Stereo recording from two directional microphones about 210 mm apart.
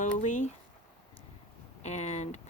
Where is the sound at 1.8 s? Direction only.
35° left (ahead or behind).